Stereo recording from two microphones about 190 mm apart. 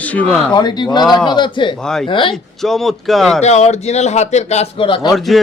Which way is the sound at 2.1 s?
25° left (ahead or behind).